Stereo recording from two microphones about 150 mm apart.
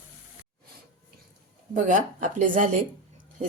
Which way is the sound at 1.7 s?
60° right (ahead or behind).